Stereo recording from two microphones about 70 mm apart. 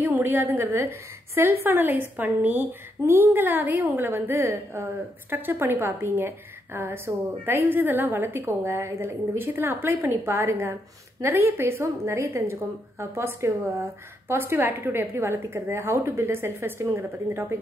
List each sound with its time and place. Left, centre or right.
0.0 s a woman's voice: right